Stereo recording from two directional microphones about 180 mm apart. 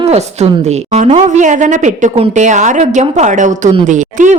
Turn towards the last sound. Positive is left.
turn(degrees=-45)  # may be behind; listen again after turning